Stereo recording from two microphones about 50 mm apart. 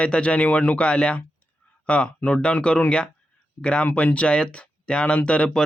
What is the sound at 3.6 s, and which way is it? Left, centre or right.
Speech, centre.